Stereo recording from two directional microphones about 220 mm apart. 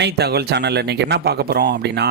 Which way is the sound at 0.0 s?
45° right (ahead or behind).